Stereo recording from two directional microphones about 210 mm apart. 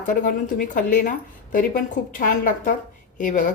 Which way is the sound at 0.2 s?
40° left (ahead or behind).